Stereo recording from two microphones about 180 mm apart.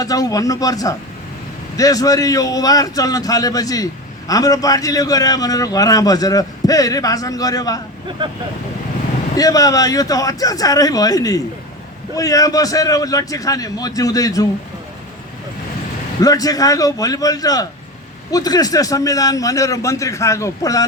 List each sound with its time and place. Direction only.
0.0 s a man's voice: 20° left (ahead or behind)
8.2 s speech: 25° right (ahead or behind)
9.4 s a man's voice: 20° left (ahead or behind)
16.2 s a man's voice: 20° left (ahead or behind)